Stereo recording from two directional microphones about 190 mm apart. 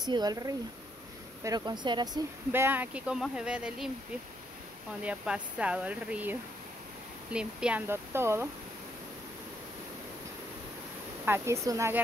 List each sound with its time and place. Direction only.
0.0 s speech: 20° right (ahead or behind)
2.5 s speech: 10° right (ahead or behind)
5.0 s speech: 5° right (ahead or behind)
7.3 s speech: 5° right (ahead or behind)
11.2 s speech: 15° right (ahead or behind)